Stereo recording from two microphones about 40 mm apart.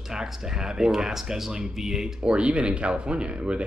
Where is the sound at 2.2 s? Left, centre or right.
Right.